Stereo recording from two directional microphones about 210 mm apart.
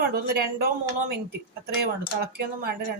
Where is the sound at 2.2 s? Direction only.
45° right (ahead or behind).